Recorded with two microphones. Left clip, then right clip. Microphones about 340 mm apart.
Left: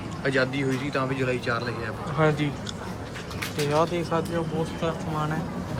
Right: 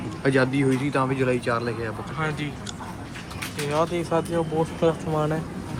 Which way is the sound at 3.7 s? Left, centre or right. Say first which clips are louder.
Right 2 dB; centre.